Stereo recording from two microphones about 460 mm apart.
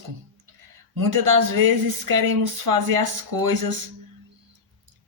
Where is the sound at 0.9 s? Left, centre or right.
Right.